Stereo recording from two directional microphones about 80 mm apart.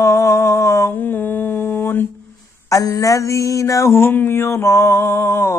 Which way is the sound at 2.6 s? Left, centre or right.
Left.